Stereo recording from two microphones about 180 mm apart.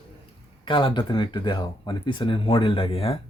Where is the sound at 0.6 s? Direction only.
25° left (ahead or behind).